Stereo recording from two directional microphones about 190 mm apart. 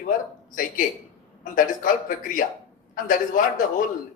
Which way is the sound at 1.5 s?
45° left (ahead or behind).